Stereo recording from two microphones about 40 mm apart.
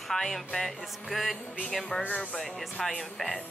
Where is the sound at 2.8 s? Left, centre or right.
Centre.